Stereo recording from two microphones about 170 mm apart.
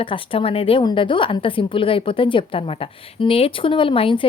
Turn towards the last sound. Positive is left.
turn(degrees=30)  # may be behind; listen again after turning